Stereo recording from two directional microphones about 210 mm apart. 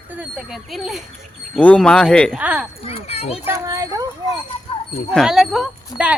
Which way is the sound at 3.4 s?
15° right (ahead or behind).